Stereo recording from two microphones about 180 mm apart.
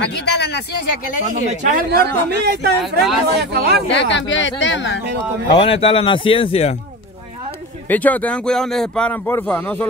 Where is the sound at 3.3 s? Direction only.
65° right (ahead or behind).